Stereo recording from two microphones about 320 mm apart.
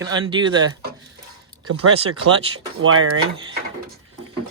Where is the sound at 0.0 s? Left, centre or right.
Centre.